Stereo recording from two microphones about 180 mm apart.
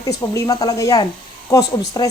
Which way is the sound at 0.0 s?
20° left (ahead or behind).